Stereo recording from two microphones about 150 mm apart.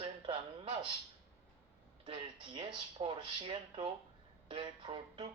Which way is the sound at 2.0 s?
35° right (ahead or behind).